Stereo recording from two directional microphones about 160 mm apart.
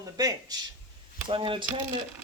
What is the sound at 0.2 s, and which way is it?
Speech, 20° right (ahead or behind).